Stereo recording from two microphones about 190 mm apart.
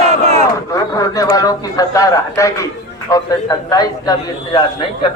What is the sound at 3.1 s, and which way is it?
A man's voice, 20° left (ahead or behind).